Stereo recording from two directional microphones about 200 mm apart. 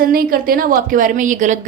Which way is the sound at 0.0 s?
45° right (ahead or behind).